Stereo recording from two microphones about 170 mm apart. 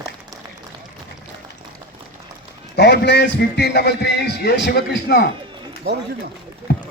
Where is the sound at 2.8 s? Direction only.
85° left; by 5.2 s 70° left (ahead or behind).